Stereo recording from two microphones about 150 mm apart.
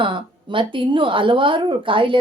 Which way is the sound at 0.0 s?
35° right (ahead or behind).